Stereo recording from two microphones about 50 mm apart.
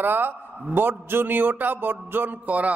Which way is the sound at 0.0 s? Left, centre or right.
Right.